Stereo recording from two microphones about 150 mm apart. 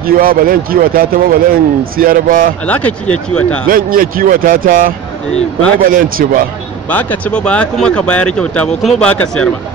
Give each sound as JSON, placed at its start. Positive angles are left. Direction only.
{"t": 0.0, "sound": "a man's voice", "side_deg": -75}
{"t": 2.6, "sound": "speech", "side_deg": 10}
{"t": 3.6, "sound": "a man's voice", "side_deg": -70}
{"t": 6.9, "sound": "speech", "side_deg": 10}